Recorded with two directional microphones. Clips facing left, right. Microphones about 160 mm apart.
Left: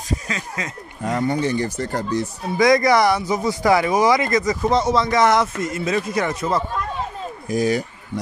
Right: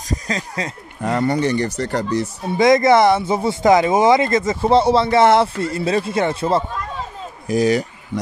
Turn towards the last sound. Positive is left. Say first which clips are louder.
# right 3 dB
turn(degrees=-85)